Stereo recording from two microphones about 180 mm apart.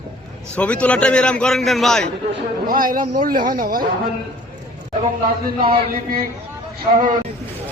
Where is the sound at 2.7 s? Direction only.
50° right (ahead or behind).